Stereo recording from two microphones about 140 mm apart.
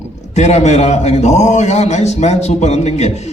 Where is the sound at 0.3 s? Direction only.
55° left (ahead or behind).